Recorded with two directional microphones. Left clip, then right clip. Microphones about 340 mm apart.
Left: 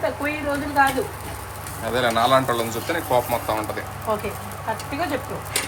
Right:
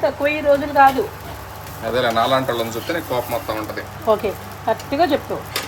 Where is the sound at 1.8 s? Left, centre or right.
Centre.